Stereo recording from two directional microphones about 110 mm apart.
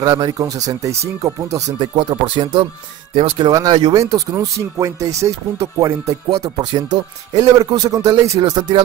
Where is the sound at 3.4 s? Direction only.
40° right (ahead or behind).